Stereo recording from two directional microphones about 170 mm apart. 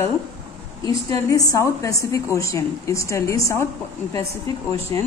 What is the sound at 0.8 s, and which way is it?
A woman's voice, 20° left (ahead or behind).